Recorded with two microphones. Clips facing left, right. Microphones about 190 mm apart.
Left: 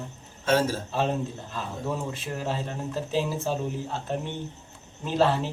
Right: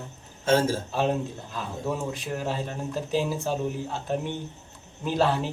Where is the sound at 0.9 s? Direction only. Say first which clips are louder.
Right 1 dB; 5° right (ahead or behind).